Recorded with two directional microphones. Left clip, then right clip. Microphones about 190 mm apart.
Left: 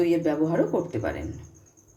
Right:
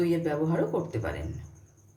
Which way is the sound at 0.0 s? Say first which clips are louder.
Left 4 dB; 30° left (ahead or behind).